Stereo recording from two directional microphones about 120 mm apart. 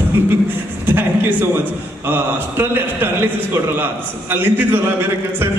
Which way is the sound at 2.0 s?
15° right (ahead or behind).